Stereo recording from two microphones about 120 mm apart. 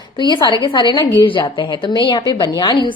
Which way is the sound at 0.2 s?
35° left (ahead or behind).